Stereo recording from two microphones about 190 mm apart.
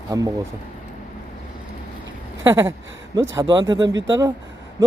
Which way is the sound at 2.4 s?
15° right (ahead or behind).